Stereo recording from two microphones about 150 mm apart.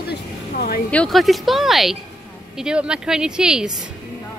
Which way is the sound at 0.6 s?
80° left.